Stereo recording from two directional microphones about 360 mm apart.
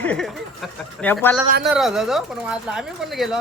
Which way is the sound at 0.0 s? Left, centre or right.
Centre.